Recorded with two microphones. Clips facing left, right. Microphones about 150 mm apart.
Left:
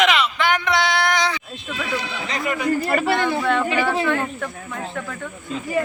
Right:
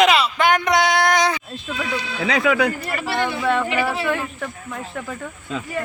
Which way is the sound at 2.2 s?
90° right.